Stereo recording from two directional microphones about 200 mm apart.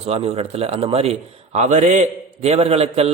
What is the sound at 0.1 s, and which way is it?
A man's voice, 30° right (ahead or behind).